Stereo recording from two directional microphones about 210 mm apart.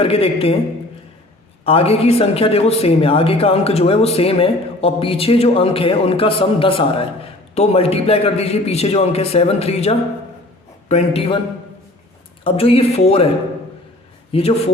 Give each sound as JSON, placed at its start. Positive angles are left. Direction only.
{"t": 0.0, "sound": "speech", "side_deg": 30}
{"t": 1.6, "sound": "speech", "side_deg": 30}
{"t": 12.5, "sound": "speech", "side_deg": 25}
{"t": 14.3, "sound": "speech", "side_deg": 25}